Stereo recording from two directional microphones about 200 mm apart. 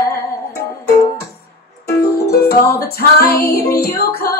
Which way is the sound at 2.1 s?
50° left (ahead or behind).